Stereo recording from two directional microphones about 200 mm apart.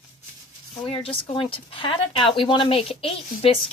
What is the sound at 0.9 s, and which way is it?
A woman's voice, 30° left (ahead or behind).